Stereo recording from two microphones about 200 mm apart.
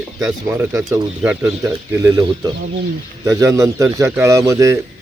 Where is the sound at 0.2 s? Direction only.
5° right (ahead or behind).